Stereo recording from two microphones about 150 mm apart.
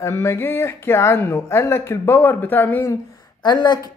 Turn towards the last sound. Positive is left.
turn(degrees=30)  # may be behind; listen again after turning